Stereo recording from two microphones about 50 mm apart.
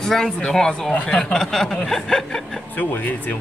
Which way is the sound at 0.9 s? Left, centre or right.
Left.